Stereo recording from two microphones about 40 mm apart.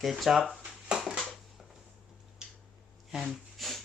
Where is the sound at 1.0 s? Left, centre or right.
Centre.